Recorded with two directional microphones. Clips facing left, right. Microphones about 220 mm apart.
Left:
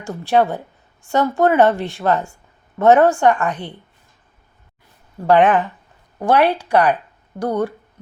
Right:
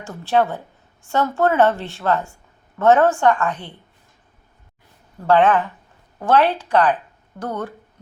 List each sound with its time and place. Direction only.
0.0 s a woman's voice: 15° left (ahead or behind)
5.2 s a woman's voice: 15° left (ahead or behind)